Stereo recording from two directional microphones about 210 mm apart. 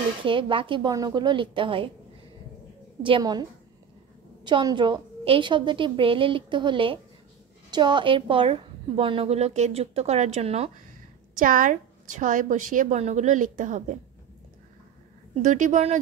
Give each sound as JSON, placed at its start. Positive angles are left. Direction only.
{"t": 0.2, "sound": "a woman's voice", "side_deg": -25}
{"t": 3.0, "sound": "a woman's voice", "side_deg": -20}
{"t": 4.5, "sound": "a woman's voice", "side_deg": -20}
{"t": 11.3, "sound": "a woman's voice", "side_deg": -40}
{"t": 15.4, "sound": "a woman's voice", "side_deg": -35}